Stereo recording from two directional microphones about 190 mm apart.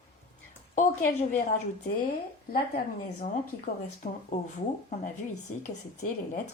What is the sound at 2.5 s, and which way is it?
Speech, 50° left (ahead or behind).